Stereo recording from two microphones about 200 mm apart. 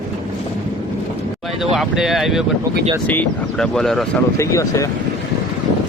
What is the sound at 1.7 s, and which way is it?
Speech, centre (ahead or behind).